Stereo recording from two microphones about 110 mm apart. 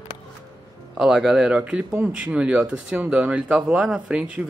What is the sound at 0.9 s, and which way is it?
Speech, 5° right (ahead or behind).